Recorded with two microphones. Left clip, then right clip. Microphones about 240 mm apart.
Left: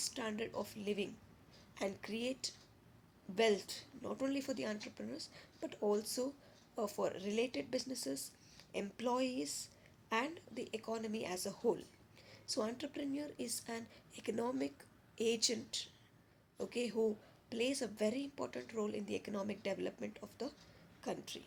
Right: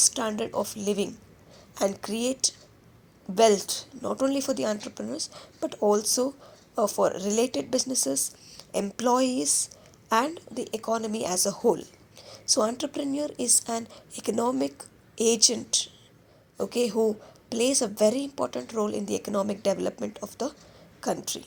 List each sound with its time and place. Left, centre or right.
0.1 s speech: right